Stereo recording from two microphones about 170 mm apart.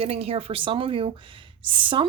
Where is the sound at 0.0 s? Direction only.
35° right (ahead or behind).